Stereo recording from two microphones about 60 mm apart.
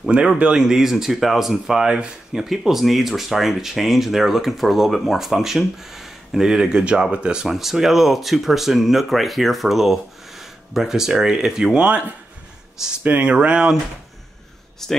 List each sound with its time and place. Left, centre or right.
0.4 s speech: centre
2.4 s speech: centre
13.2 s speech: centre
14.8 s speech: centre